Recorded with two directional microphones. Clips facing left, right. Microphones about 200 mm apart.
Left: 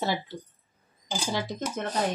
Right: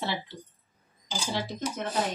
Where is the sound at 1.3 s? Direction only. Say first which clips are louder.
Even; 50° left (ahead or behind).